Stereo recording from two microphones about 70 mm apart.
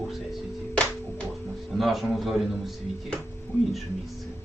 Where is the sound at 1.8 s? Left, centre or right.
Centre.